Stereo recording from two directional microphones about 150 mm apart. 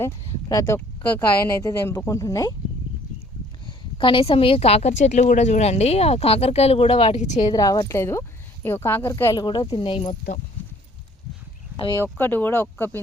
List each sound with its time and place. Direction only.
0.0 s speech: 20° left (ahead or behind)
3.7 s a woman's voice: 35° left (ahead or behind); by 7.4 s 50° left (ahead or behind)
7.4 s speech: 25° left (ahead or behind)
10.1 s a woman's voice: 50° left (ahead or behind)
11.8 s speech: 25° left (ahead or behind)
12.2 s speech: 15° left (ahead or behind)